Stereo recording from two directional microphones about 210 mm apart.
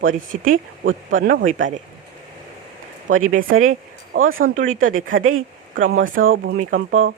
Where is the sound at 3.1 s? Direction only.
75° right (ahead or behind).